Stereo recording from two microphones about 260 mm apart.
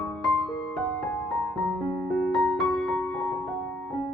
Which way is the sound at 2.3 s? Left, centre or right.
Centre.